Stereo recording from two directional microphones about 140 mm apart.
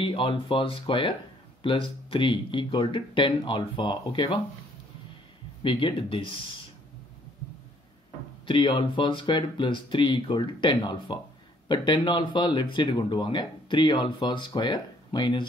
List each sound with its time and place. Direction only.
0.0 s speech: 40° left (ahead or behind)
5.6 s speech: 35° left (ahead or behind)
8.5 s speech: 35° left (ahead or behind)